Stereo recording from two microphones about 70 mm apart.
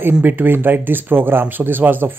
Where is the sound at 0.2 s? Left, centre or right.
Right.